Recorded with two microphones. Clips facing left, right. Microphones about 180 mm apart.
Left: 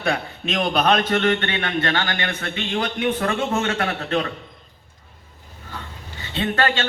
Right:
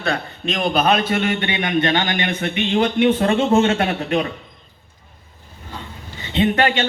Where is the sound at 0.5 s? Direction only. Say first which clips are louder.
Right 1 dB; centre (ahead or behind).